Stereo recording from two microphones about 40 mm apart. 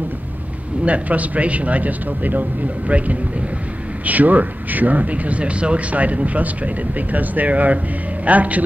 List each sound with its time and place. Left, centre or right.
0.8 s speech: right